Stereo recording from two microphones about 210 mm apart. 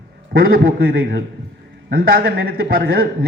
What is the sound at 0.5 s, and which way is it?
A man's voice, 50° right (ahead or behind).